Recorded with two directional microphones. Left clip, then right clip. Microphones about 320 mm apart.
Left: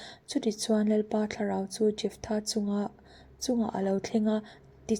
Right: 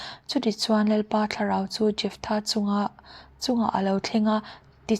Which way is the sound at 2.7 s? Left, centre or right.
Centre.